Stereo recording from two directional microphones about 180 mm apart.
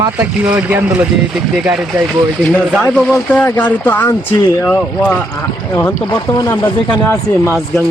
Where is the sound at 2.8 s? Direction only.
10° left (ahead or behind).